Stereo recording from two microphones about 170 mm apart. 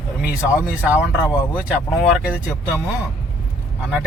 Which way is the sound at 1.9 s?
Centre (ahead or behind).